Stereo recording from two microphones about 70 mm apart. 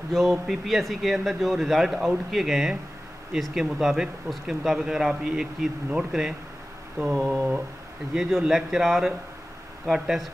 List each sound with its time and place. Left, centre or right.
0.1 s speech: centre
8.1 s speech: centre